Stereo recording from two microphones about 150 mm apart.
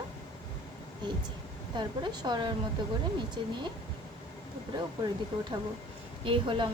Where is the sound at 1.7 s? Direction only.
30° right (ahead or behind).